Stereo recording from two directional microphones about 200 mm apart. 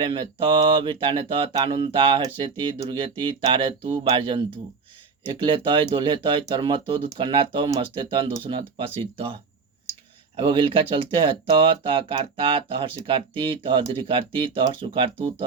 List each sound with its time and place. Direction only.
0.0 s speech: 25° right (ahead or behind)